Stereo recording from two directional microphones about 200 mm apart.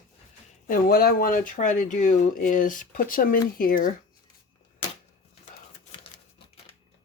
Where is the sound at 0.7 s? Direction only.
50° left (ahead or behind).